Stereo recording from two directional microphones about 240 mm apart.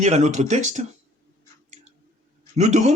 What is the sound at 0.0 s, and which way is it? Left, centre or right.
Speech, right.